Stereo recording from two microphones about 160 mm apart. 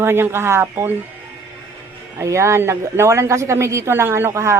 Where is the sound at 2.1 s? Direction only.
20° right (ahead or behind).